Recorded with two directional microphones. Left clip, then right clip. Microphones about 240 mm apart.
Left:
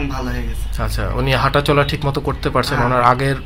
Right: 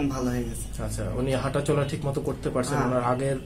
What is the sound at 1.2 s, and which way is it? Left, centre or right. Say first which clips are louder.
Speech: left 11 dB; left.